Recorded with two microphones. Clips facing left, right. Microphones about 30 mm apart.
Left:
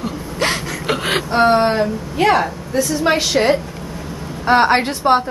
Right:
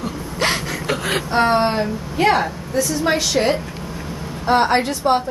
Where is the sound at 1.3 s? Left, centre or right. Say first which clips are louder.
Left 3 dB; centre.